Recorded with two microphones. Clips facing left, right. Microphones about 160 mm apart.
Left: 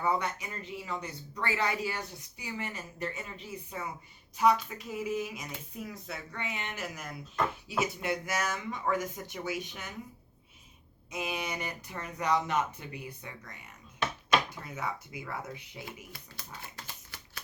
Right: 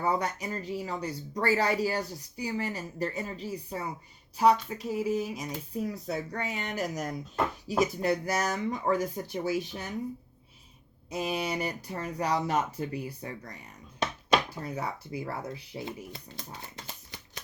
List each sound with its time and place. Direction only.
0.0 s speech: 35° right (ahead or behind)
11.1 s speech: 35° right (ahead or behind)